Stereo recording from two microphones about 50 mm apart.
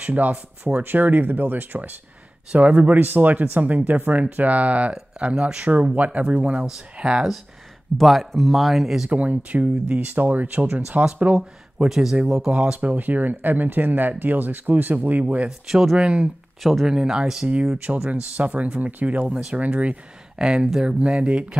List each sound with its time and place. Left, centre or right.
0.0 s speech: right
6.6 s speech: centre
8.0 s speech: centre
9.1 s speech: right
11.3 s speech: centre
12.4 s speech: centre
12.8 s speech: right
15.7 s speech: centre
16.0 s speech: right
17.7 s speech: right
20.3 s speech: centre